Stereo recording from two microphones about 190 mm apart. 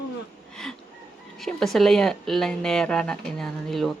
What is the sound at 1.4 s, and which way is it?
Speech, centre (ahead or behind).